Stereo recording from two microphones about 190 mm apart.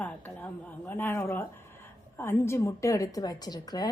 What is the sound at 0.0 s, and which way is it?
A woman's voice, 5° left (ahead or behind).